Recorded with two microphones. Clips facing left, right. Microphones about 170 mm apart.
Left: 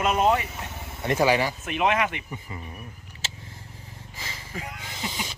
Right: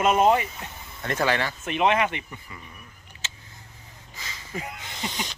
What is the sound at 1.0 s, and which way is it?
Speech, 10° left (ahead or behind).